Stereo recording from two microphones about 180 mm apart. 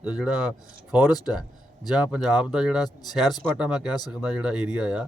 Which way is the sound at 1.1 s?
20° left (ahead or behind).